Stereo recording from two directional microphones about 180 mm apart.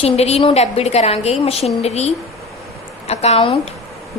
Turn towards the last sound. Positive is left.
turn(degrees=35)  # may be behind; listen again after turning